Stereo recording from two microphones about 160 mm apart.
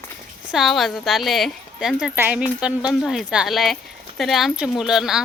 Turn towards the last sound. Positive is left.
turn(degrees=-5)  # may be behind; listen again after turning